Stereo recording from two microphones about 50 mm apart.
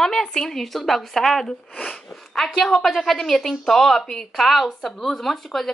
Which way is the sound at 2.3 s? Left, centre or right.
Centre.